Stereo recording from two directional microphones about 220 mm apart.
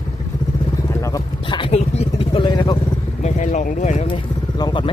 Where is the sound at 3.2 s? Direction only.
30° left (ahead or behind).